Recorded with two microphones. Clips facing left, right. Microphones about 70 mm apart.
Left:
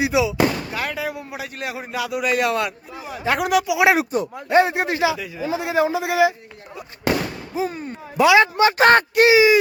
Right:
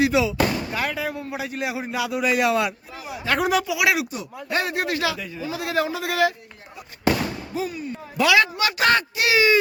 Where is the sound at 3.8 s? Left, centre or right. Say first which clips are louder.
Left 5 dB; left.